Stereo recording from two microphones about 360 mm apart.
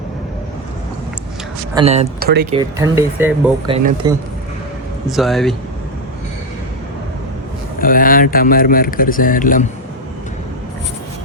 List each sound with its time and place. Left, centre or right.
1.7 s speech: centre
2.6 s speech: centre
5.0 s speech: centre
7.8 s speech: left